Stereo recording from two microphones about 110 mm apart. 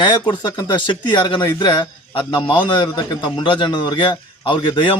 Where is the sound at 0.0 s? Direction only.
40° left (ahead or behind).